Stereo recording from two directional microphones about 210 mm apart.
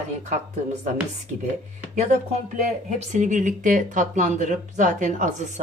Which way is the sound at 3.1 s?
35° right (ahead or behind).